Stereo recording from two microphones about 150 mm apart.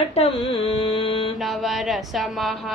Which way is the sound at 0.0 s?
45° left (ahead or behind).